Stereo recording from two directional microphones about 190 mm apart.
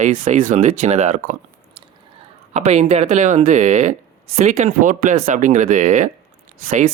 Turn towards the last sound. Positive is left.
turn(degrees=-45)  # may be behind; listen again after turning